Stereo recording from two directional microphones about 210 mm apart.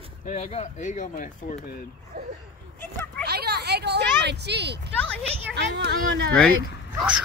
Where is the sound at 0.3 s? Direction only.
30° left (ahead or behind).